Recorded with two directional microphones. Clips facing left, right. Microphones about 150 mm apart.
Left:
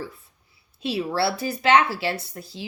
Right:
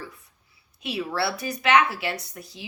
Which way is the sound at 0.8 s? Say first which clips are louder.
Left 3 dB; 30° left (ahead or behind).